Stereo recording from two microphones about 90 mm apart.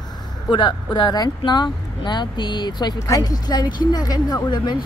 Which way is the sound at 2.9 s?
40° left (ahead or behind).